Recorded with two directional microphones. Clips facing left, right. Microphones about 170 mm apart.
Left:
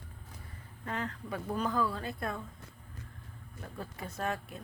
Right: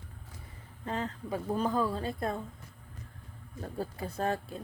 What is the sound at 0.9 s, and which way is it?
Speech, 25° right (ahead or behind).